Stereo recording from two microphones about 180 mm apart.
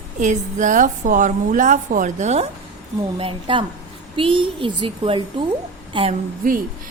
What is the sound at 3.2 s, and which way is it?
A woman's voice, 30° right (ahead or behind).